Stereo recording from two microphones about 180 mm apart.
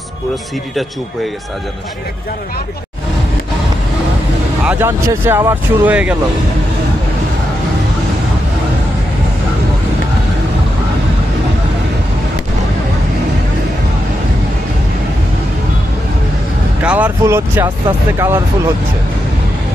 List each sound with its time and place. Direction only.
4.6 s speech: 15° right (ahead or behind)
16.8 s speech: 10° right (ahead or behind)